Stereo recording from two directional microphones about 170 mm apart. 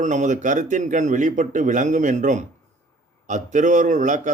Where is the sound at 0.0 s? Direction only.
45° right (ahead or behind).